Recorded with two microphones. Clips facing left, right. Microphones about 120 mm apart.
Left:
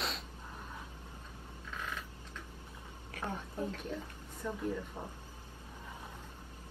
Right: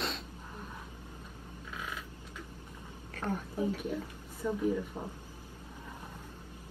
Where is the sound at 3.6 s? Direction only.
10° right (ahead or behind).